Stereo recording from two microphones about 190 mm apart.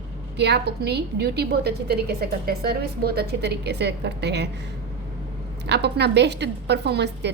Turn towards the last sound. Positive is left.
turn(degrees=-60)  # may be behind; listen again after turning